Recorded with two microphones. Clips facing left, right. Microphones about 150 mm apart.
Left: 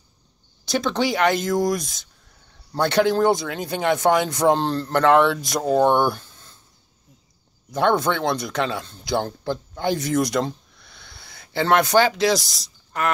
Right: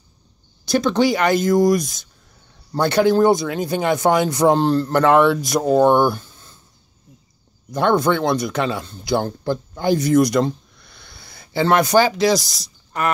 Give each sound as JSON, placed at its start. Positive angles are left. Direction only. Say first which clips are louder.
{"t": 0.7, "sound": "speech", "louder": "right 5 dB", "side_deg": 0}
{"t": 7.7, "sound": "speech", "louder": "right 3 dB", "side_deg": 0}